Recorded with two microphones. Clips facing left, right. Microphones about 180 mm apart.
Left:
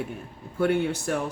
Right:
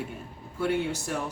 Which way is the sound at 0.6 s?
55° left (ahead or behind).